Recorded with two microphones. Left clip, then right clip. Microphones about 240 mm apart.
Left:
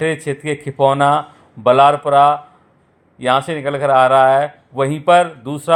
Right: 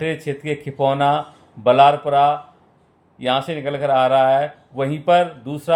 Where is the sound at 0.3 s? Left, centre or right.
Centre.